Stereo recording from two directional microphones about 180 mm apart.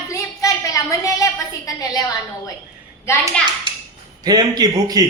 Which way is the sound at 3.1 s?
15° left (ahead or behind).